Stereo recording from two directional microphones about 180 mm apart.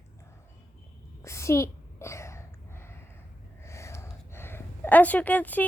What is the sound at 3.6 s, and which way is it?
Speech, 15° left (ahead or behind).